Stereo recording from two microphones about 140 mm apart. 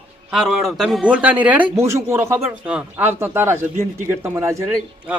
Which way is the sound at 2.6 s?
10° right (ahead or behind).